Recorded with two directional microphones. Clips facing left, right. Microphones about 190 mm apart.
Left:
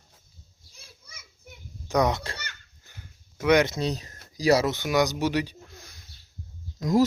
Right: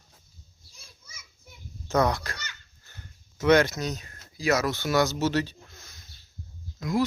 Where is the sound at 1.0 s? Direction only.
60° left (ahead or behind).